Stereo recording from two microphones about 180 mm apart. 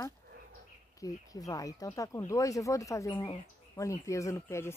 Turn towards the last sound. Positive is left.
turn(degrees=15)  # may be behind; listen again after turning